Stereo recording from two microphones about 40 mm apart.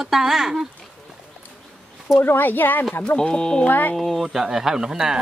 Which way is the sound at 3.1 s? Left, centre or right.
Left.